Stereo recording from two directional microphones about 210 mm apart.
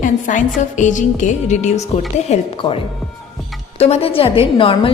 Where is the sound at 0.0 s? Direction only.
35° left (ahead or behind).